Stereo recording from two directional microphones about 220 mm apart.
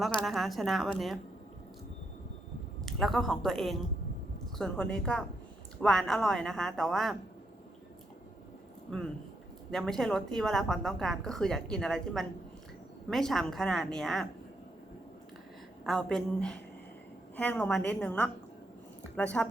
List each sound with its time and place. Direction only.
0.3 s a woman's voice: centre (ahead or behind)
2.8 s a woman's voice: centre (ahead or behind)
9.7 s a woman's voice: centre (ahead or behind)
15.9 s a woman's voice: 5° left (ahead or behind)